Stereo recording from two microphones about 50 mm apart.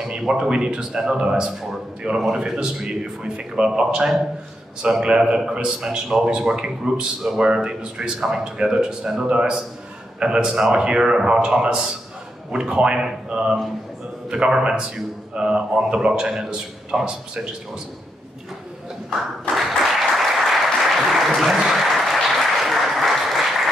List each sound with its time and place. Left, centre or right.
0.0 s a man's voice: centre
19.5 s applause: centre